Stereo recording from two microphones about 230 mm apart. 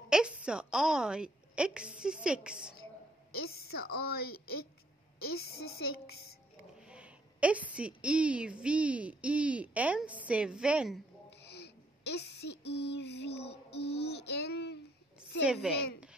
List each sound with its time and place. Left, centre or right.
0.1 s a woman's voice: centre
3.7 s a woman's voice: left
5.8 s a woman's voice: left
6.8 s a woman's voice: centre
11.2 s a sound: left
13.5 s child singing: left
15.4 s a woman's voice: centre